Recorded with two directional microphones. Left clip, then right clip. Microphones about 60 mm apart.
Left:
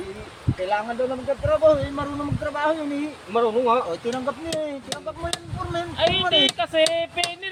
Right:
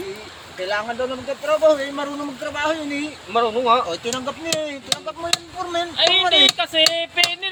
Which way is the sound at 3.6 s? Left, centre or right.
Right.